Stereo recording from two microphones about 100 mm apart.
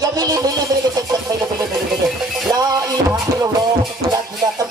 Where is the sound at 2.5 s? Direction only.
40° right (ahead or behind).